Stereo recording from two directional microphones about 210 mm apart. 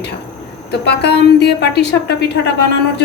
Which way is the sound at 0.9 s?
55° left (ahead or behind).